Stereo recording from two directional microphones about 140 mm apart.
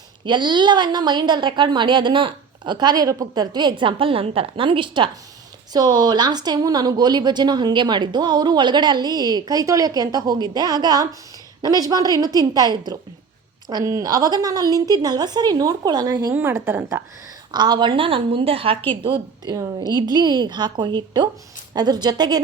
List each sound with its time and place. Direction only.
0.3 s a woman's voice: 35° right (ahead or behind)
16.3 s a woman's voice: 15° right (ahead or behind)
17.5 s a woman's voice: 30° right (ahead or behind)